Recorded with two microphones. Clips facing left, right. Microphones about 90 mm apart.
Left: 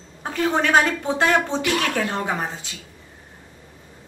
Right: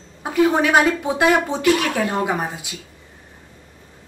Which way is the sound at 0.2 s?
10° right (ahead or behind).